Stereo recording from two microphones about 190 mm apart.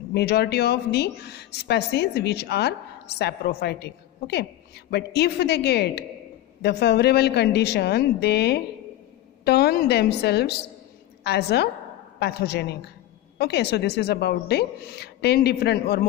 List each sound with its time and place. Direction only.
0.1 s speech: 60° left (ahead or behind)